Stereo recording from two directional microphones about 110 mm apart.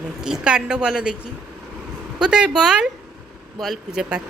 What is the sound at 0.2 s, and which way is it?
Speech, 5° right (ahead or behind).